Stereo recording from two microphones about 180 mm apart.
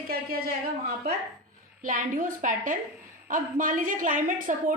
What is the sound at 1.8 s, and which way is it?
A woman's voice, 45° right (ahead or behind).